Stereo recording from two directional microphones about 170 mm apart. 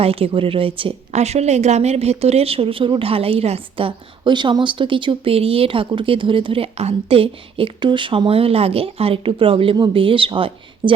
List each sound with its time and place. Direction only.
0.0 s a woman's voice: 35° right (ahead or behind)